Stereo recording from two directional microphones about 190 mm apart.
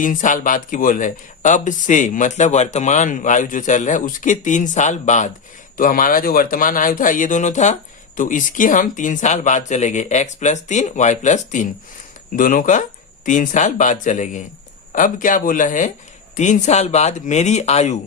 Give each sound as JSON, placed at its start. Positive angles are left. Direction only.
{"t": 0.0, "sound": "speech", "side_deg": 40}